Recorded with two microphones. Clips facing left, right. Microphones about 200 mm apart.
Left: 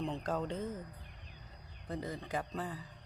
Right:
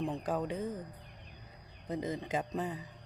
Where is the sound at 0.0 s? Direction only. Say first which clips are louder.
Right 2 dB; 10° right (ahead or behind).